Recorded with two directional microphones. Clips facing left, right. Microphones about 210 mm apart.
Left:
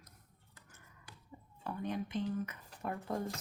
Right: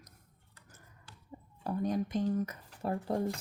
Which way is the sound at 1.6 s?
40° right (ahead or behind).